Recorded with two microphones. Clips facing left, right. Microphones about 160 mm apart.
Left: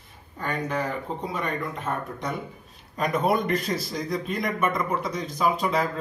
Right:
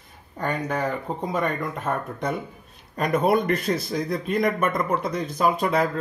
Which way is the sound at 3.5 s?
55° right (ahead or behind).